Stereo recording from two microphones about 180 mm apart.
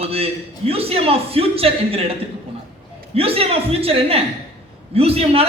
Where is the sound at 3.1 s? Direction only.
30° right (ahead or behind).